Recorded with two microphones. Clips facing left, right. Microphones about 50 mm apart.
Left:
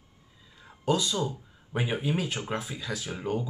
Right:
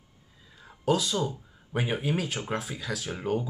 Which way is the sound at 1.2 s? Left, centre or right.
Right.